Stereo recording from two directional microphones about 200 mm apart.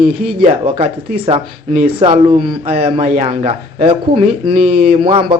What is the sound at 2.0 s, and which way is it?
Speech, 25° right (ahead or behind).